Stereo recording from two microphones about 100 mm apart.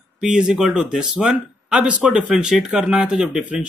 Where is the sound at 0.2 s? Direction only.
5° right (ahead or behind).